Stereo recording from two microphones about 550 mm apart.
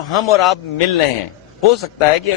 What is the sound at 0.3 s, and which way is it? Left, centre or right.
Speech, left.